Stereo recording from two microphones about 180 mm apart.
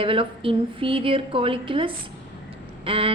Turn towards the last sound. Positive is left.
turn(degrees=-30)  # may be behind; listen again after turning